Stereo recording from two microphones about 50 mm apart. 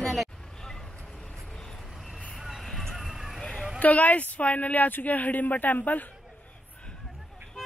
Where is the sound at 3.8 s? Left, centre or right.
Left.